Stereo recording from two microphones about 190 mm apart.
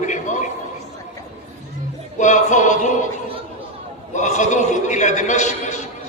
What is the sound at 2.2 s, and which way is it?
Speech, 40° left (ahead or behind).